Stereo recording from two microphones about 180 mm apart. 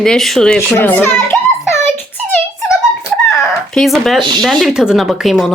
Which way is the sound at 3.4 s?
Centre (ahead or behind).